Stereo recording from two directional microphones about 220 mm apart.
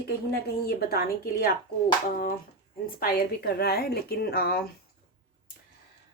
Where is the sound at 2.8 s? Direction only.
40° left (ahead or behind).